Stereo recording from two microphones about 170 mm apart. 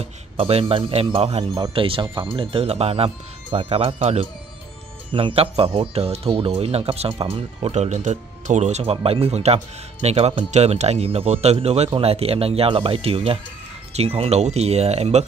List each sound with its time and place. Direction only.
0.0 s a man's voice: 35° right (ahead or behind)